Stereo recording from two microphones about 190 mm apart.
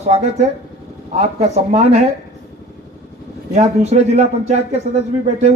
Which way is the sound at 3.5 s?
35° right (ahead or behind).